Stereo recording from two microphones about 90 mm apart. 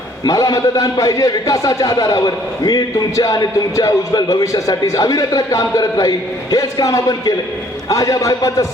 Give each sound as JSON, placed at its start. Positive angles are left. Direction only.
{"t": 0.3, "sound": "a man's voice", "side_deg": 40}